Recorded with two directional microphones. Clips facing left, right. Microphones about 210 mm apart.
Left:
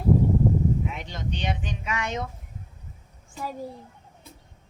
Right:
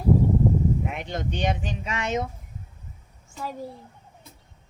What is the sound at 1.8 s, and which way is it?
Speech, 25° right (ahead or behind).